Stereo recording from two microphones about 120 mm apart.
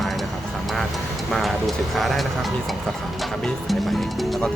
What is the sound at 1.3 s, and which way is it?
Speech, centre (ahead or behind).